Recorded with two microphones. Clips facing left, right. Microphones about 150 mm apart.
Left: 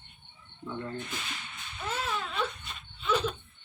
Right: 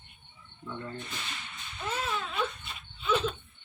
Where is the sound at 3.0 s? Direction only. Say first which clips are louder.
Even; 5° right (ahead or behind).